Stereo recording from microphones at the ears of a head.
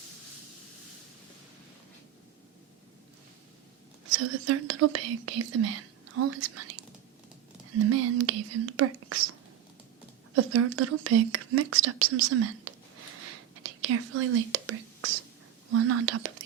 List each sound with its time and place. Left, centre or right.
4.0 s speech: right
10.3 s speech: right